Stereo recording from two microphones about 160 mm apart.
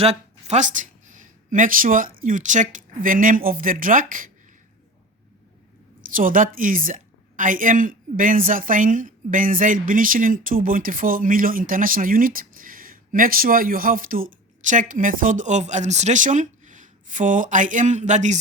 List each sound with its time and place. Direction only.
0.0 s speech: 40° right (ahead or behind); by 4.3 s 55° right (ahead or behind)
6.1 s a woman's voice: 60° right (ahead or behind)